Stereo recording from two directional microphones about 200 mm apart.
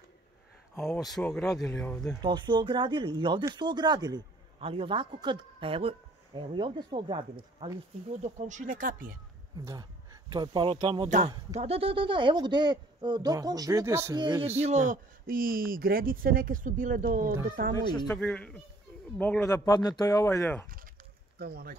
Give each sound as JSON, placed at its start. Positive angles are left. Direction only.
{"t": 0.9, "sound": "speech", "side_deg": 0}
{"t": 2.2, "sound": "speech", "side_deg": -25}
{"t": 8.1, "sound": "speech", "side_deg": -35}
{"t": 10.3, "sound": "speech", "side_deg": -25}
{"t": 11.1, "sound": "speech", "side_deg": -35}
{"t": 14.6, "sound": "speech", "side_deg": -35}
{"t": 18.1, "sound": "speech", "side_deg": 5}
{"t": 21.4, "sound": "speech", "side_deg": -50}